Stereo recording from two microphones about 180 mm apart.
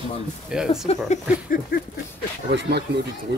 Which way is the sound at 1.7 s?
55° left (ahead or behind).